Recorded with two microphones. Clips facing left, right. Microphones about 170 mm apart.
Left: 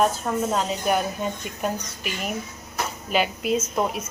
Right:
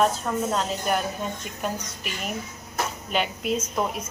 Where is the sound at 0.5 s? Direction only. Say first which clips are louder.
Left 2 dB; 5° left (ahead or behind).